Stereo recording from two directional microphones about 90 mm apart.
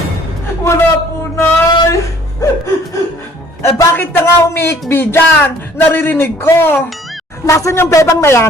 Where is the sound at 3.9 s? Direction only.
25° left (ahead or behind).